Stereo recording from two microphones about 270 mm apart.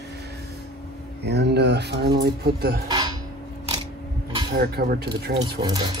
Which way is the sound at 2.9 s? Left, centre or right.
Centre.